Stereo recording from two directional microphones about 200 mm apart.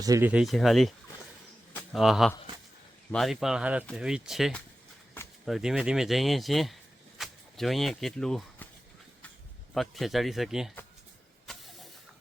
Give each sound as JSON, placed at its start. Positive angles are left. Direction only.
{"t": 0.0, "sound": "speech", "side_deg": -15}
{"t": 9.7, "sound": "speech", "side_deg": 0}
{"t": 11.4, "sound": "vehicle", "side_deg": 0}